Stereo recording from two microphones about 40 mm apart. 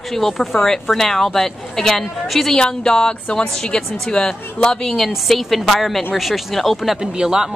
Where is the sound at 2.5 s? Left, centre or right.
Left.